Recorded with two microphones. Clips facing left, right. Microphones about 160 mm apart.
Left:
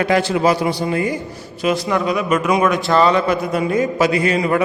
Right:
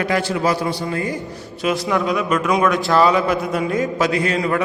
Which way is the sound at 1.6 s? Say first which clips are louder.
Left 1 dB; centre (ahead or behind).